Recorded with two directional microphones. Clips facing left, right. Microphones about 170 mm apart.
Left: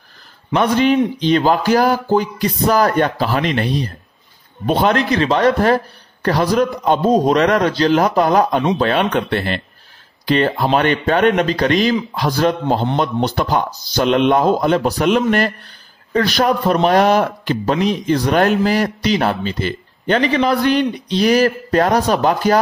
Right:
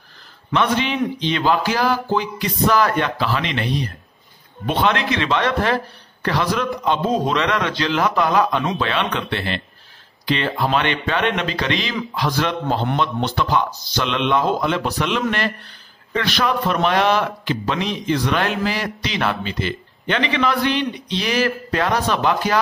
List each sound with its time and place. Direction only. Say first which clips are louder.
0.5 s a man's voice: left 6 dB; 45° left (ahead or behind)